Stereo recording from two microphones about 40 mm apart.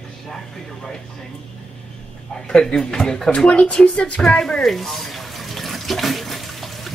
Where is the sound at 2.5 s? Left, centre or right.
Centre.